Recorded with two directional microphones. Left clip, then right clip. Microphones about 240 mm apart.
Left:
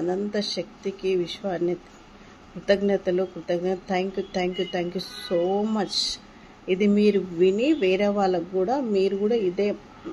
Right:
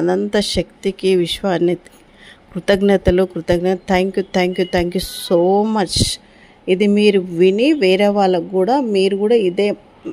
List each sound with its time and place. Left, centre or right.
0.0 s a woman's voice: right